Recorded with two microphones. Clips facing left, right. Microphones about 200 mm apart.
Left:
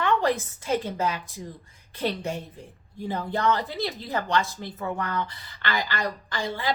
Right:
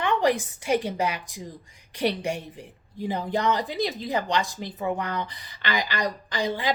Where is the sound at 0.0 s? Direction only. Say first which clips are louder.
Right 1 dB; 15° right (ahead or behind).